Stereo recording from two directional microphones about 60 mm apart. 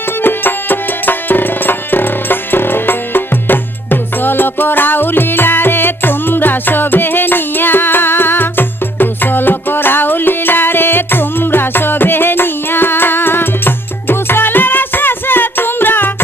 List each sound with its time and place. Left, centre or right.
0.2 s music: left